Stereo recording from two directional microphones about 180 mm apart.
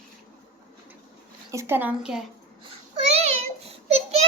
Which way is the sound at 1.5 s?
15° right (ahead or behind).